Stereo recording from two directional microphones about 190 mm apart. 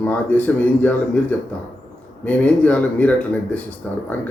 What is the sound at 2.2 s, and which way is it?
A man's voice, 5° left (ahead or behind).